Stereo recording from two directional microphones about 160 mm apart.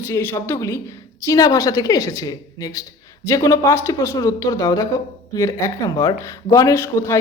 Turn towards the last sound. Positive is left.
turn(degrees=20)  # may be behind; listen again after turning